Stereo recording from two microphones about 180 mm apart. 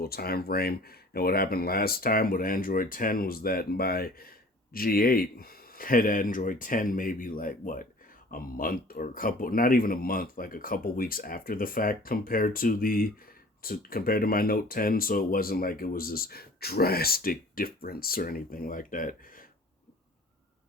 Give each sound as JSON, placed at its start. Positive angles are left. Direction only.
{"t": 0.0, "sound": "speech", "side_deg": 60}